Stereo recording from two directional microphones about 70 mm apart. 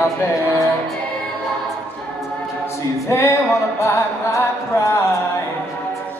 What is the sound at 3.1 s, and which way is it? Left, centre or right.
Music, left.